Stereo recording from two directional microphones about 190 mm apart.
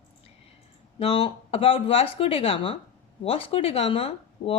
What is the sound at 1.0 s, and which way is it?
Speech, 30° left (ahead or behind).